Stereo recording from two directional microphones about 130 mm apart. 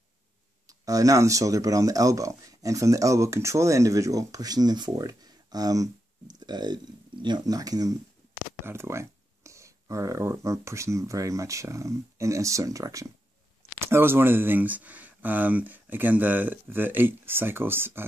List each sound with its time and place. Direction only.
0.7 s speech: 25° right (ahead or behind)